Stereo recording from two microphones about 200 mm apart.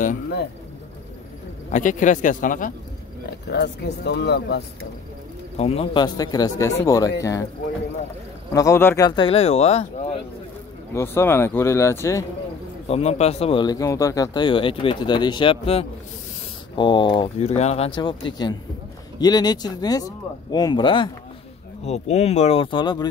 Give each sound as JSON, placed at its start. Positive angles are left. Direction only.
{"t": 1.7, "sound": "speech", "side_deg": 40}
{"t": 3.3, "sound": "speech", "side_deg": 55}
{"t": 5.6, "sound": "speech", "side_deg": 30}
{"t": 8.5, "sound": "speech", "side_deg": 15}
{"t": 11.0, "sound": "speech", "side_deg": 15}
{"t": 12.8, "sound": "speech", "side_deg": 30}